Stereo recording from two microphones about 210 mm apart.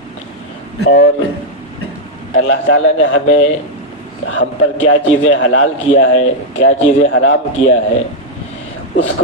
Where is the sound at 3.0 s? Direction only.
65° left (ahead or behind).